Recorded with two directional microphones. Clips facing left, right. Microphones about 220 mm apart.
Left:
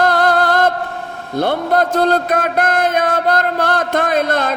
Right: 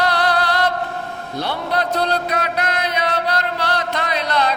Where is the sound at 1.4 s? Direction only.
50° left (ahead or behind).